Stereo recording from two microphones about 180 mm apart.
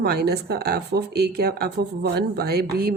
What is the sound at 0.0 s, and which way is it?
Speech, 60° right (ahead or behind).